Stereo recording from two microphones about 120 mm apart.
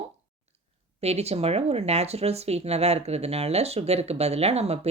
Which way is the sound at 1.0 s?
60° right (ahead or behind).